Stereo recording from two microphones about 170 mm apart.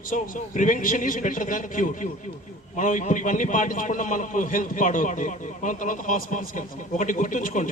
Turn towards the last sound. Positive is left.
turn(degrees=50)  # may be behind; listen again after turning